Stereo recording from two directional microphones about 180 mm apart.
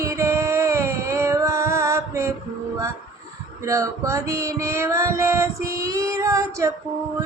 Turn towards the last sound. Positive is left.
turn(degrees=-15)  # may be behind; listen again after turning